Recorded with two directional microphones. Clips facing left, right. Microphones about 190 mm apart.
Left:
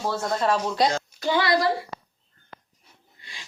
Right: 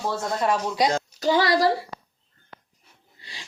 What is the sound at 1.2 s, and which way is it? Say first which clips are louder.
Speech: right 2 dB; 40° right (ahead or behind).